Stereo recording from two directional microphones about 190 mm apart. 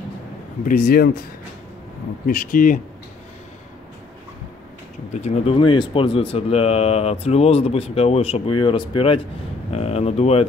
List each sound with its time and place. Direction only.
0.7 s speech: 50° left (ahead or behind)
2.2 s speech: 45° left (ahead or behind)
5.1 s speech: 35° left (ahead or behind)